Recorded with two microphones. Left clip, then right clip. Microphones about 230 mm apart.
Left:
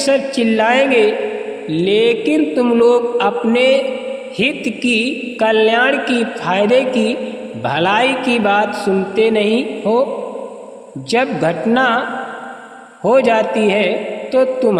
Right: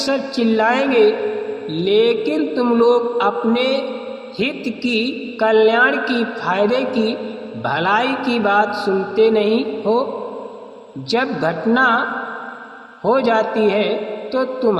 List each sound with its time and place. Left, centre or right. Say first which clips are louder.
0.0 s a man's voice: left 4 dB; left
11.1 s a man's voice: left 3 dB; left